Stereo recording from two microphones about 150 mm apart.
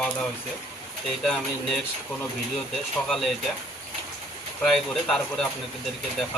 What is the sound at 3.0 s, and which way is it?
Speech, centre (ahead or behind).